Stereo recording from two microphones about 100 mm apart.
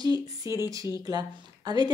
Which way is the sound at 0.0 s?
35° right (ahead or behind).